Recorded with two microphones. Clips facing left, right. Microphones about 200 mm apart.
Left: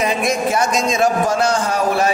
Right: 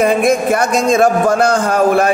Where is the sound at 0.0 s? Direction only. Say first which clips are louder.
Right 6 dB; 55° right (ahead or behind).